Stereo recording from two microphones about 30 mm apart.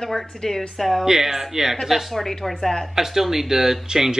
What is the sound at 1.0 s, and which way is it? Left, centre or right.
Speech, centre.